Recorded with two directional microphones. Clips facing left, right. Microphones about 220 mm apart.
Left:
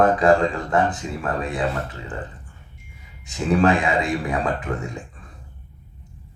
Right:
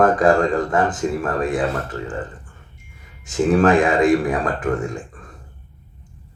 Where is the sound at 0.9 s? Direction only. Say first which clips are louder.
Right 5 dB; 50° right (ahead or behind).